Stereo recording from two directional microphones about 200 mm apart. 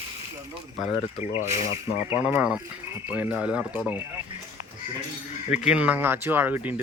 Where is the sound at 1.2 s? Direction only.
35° left (ahead or behind).